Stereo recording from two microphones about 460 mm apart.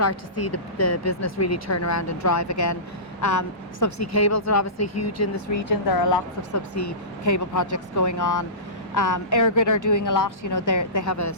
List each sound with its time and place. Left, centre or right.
0.0 s speech: left